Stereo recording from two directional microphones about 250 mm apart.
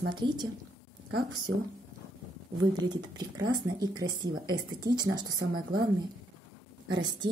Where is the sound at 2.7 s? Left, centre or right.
Centre.